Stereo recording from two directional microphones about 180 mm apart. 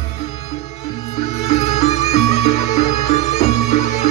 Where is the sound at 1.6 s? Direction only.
35° left (ahead or behind).